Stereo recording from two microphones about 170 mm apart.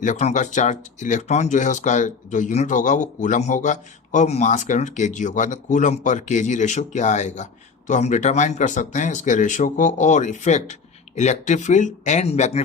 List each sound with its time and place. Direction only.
0.0 s speech: 45° left (ahead or behind)